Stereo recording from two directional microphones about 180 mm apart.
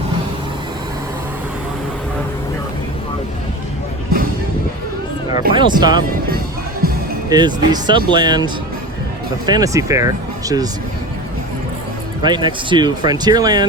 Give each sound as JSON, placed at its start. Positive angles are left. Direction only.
{"t": 5.3, "sound": "music", "side_deg": -25}
{"t": 6.8, "sound": "music", "side_deg": -60}
{"t": 7.3, "sound": "speech", "side_deg": -25}
{"t": 9.5, "sound": "speech", "side_deg": -20}
{"t": 12.2, "sound": "speech", "side_deg": -25}